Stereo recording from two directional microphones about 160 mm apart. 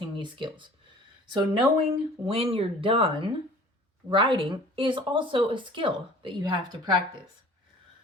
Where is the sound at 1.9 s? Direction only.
35° right (ahead or behind).